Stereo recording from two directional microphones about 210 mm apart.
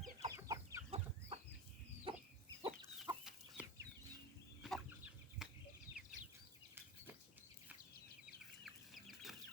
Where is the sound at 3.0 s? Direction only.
10° right (ahead or behind).